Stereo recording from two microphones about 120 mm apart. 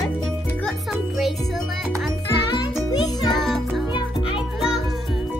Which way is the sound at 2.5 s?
35° left (ahead or behind).